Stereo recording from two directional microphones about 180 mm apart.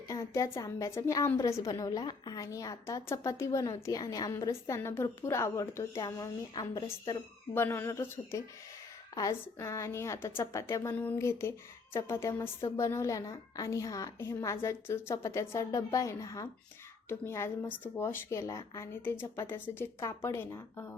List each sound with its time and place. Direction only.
0.1 s a woman's voice: 15° left (ahead or behind)